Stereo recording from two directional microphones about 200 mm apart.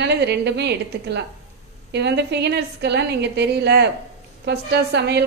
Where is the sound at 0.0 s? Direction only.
60° right (ahead or behind).